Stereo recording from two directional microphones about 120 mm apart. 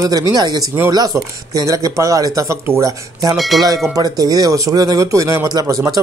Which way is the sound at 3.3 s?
Centre (ahead or behind).